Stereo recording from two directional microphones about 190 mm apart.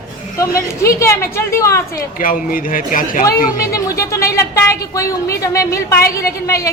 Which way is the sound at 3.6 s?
15° left (ahead or behind).